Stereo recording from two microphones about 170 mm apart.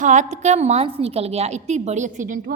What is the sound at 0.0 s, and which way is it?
A woman's voice, 45° right (ahead or behind).